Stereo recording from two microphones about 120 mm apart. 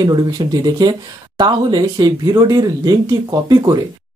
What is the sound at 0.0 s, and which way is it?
Speech, 35° right (ahead or behind).